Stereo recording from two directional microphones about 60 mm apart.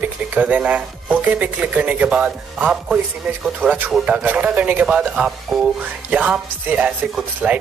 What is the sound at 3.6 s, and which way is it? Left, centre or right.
Speech, right.